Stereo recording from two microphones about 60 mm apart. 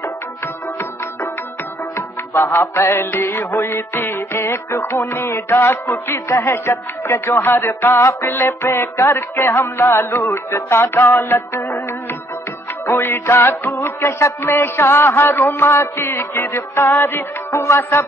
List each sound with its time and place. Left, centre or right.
2.0 s music: left
12.8 s music: left